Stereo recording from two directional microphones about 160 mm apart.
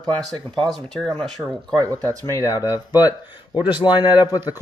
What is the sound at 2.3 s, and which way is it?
Speech, 15° left (ahead or behind).